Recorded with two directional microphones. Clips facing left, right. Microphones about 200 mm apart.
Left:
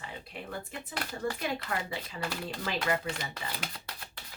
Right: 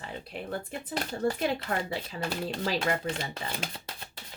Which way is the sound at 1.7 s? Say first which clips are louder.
Right 4 dB; 40° right (ahead or behind).